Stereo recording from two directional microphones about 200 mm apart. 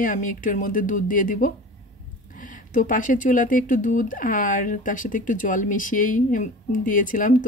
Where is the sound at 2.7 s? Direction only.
40° left (ahead or behind).